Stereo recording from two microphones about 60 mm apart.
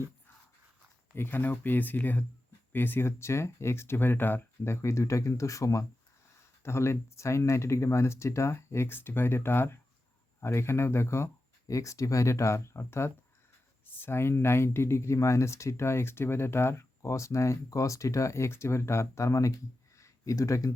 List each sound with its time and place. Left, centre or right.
1.1 s speech: left
6.6 s speech: left
11.7 s speech: left
20.0 s a sound: left